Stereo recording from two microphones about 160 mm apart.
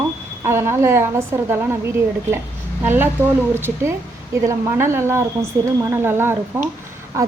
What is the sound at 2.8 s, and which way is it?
A woman's voice, 10° right (ahead or behind).